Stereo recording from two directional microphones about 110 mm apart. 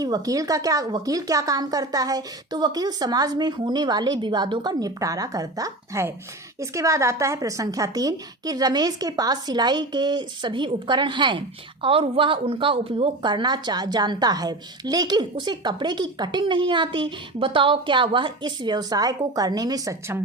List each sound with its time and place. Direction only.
0.0 s a woman's voice: 35° right (ahead or behind)